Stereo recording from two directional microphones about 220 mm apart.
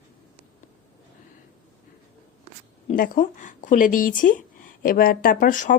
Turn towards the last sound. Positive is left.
turn(degrees=35)  # may be behind; listen again after turning